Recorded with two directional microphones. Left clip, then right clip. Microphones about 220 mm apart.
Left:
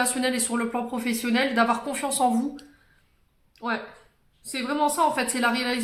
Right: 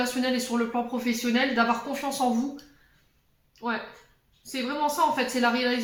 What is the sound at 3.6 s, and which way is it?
A woman's voice, 45° left (ahead or behind).